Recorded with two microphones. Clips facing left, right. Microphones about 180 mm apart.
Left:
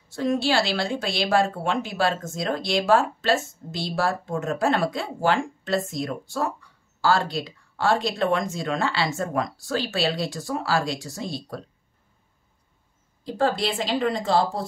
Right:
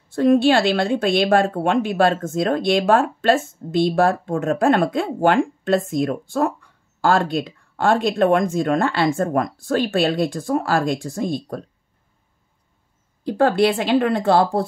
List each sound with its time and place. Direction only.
0.1 s a woman's voice: 55° right (ahead or behind)
13.2 s a woman's voice: 65° right (ahead or behind)